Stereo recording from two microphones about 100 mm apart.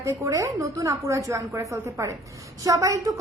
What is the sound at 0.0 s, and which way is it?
A woman's voice, 30° right (ahead or behind).